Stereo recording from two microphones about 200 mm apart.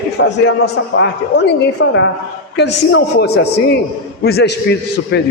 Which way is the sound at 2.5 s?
60° left (ahead or behind).